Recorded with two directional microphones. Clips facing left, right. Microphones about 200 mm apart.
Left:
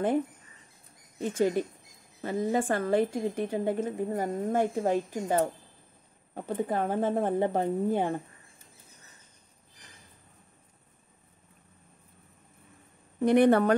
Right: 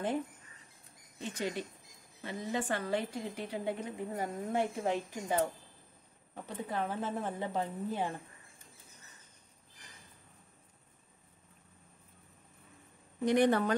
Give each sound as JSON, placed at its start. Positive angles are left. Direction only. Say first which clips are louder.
{"t": 1.2, "sound": "a woman's voice", "louder": "left 10 dB", "side_deg": 50}
{"t": 13.2, "sound": "a woman's voice", "louder": "left 6 dB", "side_deg": 60}